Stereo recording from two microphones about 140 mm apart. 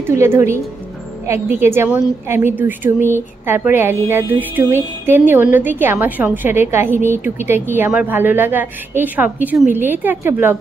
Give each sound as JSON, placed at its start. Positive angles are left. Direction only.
{"t": 0.0, "sound": "a woman's voice", "side_deg": -20}